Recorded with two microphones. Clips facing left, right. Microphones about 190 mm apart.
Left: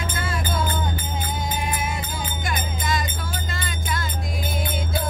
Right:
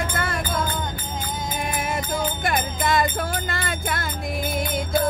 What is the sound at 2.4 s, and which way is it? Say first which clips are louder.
Music: right 5 dB; 60° right (ahead or behind).